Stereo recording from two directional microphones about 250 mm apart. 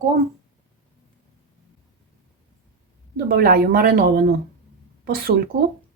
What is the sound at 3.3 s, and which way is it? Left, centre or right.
Speech, right.